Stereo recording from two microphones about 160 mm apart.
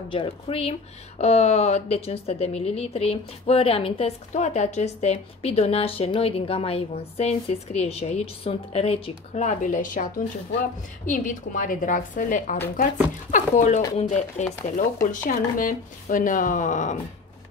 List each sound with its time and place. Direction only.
0.1 s speech: 35° left (ahead or behind); by 16.9 s 50° left (ahead or behind)